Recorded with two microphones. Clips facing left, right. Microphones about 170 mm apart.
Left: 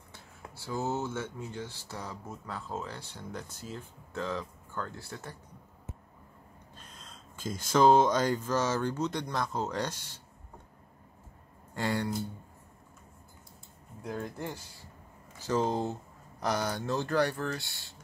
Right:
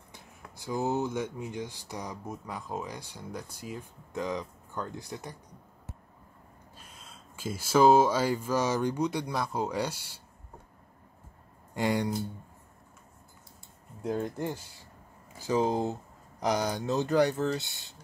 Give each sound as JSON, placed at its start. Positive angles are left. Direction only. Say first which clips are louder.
{"t": 0.1, "sound": "speech", "louder": "left 1 dB", "side_deg": -15}
{"t": 6.8, "sound": "speech", "louder": "even", "side_deg": -5}
{"t": 11.7, "sound": "speech", "louder": "right 3 dB", "side_deg": -15}
{"t": 14.0, "sound": "speech", "louder": "right 6 dB", "side_deg": -25}
{"t": 15.4, "sound": "speech", "louder": "right 2 dB", "side_deg": -15}